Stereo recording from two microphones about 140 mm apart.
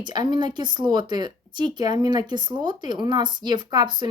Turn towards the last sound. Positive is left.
turn(degrees=-35)  # may be behind; listen again after turning